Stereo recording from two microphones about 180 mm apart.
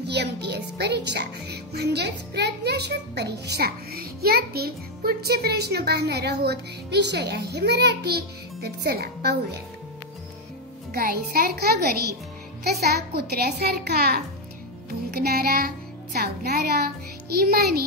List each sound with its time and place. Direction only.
0.0 s speech: 70° right (ahead or behind)
10.9 s speech: 55° right (ahead or behind)